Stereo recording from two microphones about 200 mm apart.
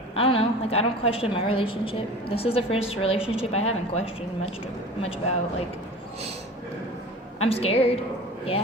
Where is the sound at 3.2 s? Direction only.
5° right (ahead or behind).